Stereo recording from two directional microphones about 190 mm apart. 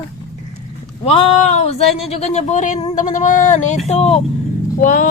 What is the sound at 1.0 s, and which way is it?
A woman's voice, 30° left (ahead or behind).